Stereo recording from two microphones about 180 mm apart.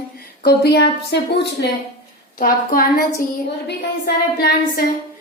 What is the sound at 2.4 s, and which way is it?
A woman's voice, 50° left (ahead or behind).